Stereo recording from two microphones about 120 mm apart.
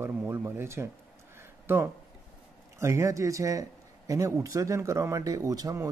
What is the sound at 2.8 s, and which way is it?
Speech, 25° right (ahead or behind).